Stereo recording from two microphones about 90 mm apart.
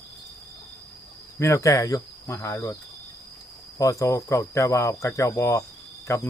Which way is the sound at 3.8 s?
40° left (ahead or behind).